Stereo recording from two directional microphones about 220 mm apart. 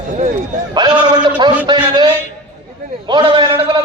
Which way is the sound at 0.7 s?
20° right (ahead or behind).